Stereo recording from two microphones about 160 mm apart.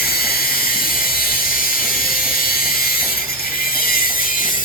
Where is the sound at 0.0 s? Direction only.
70° left (ahead or behind).